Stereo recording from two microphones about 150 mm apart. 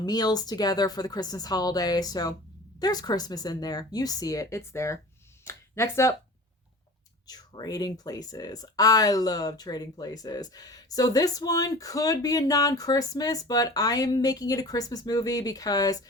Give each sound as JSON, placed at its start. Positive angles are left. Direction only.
{"t": 0.0, "sound": "speech", "side_deg": 25}
{"t": 7.3, "sound": "speech", "side_deg": 25}